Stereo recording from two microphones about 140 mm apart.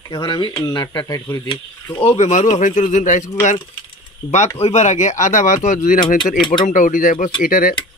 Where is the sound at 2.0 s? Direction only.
55° left (ahead or behind).